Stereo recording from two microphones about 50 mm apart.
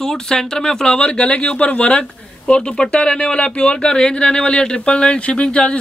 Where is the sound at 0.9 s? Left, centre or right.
Left.